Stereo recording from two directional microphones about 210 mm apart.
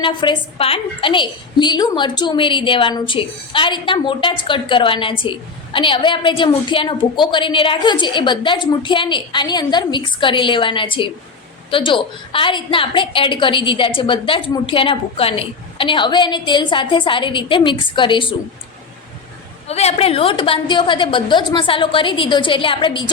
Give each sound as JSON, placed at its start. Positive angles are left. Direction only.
{"t": 0.0, "sound": "a woman's voice", "side_deg": 25}
{"t": 19.6, "sound": "a woman's voice", "side_deg": 30}